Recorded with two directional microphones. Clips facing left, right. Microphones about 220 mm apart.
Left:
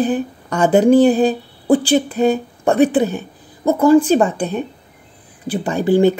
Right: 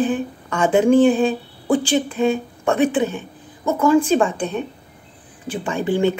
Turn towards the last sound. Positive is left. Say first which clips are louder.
# left 5 dB
turn(degrees=40)  # may be behind; listen again after turning